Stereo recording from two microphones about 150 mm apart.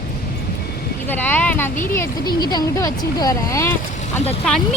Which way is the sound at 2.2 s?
30° left (ahead or behind).